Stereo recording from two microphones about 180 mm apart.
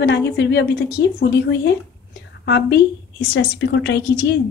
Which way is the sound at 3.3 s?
90° left.